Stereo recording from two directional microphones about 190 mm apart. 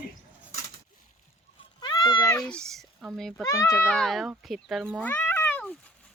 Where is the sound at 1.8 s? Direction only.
25° left (ahead or behind).